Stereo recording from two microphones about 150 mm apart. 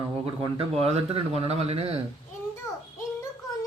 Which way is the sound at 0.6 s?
45° right (ahead or behind).